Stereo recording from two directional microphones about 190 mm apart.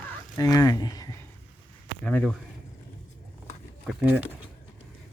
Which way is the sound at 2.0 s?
5° left (ahead or behind).